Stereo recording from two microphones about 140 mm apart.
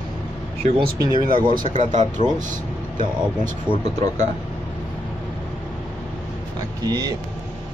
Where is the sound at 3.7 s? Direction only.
35° right (ahead or behind).